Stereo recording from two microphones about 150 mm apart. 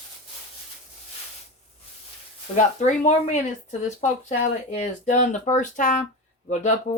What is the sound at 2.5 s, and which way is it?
Speech, 55° left (ahead or behind).